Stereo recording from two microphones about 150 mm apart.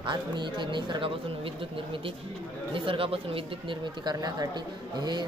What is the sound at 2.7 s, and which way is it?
Speech, 35° right (ahead or behind).